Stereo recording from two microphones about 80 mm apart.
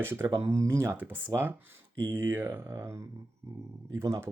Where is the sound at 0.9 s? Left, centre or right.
Right.